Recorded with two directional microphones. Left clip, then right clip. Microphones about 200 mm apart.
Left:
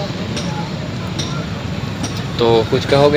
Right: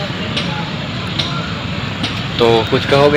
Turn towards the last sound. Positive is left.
turn(degrees=0)  # may be behind; listen again after turning